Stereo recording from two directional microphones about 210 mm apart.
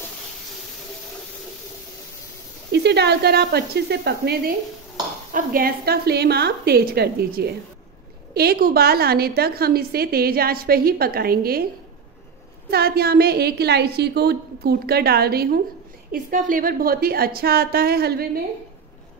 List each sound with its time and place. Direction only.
2.7 s a woman's voice: 55° right (ahead or behind)
12.6 s a woman's voice: 45° right (ahead or behind)